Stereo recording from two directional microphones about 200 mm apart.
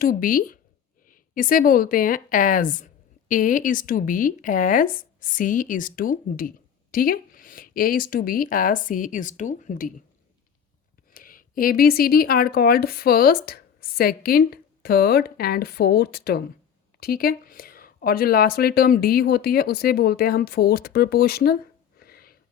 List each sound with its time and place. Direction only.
0.0 s speech: 45° left (ahead or behind)
11.1 s speech: 45° left (ahead or behind)